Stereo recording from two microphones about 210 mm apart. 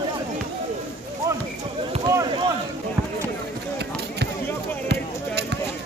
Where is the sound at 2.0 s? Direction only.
15° right (ahead or behind).